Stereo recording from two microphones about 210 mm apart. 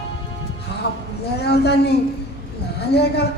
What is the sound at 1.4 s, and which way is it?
Speech, 50° left (ahead or behind).